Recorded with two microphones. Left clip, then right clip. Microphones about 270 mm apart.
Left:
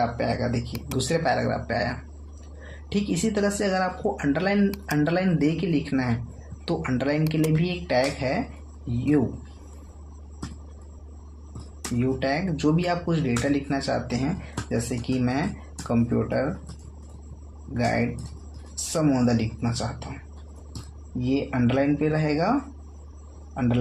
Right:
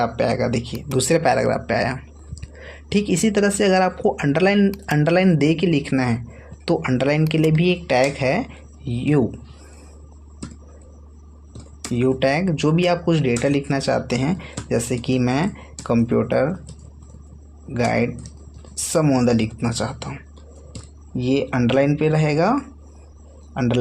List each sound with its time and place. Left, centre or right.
0.0 s speech: right
11.9 s speech: right
17.7 s speech: right
21.2 s speech: right